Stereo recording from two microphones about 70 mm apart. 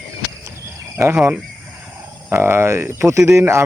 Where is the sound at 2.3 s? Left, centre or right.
Right.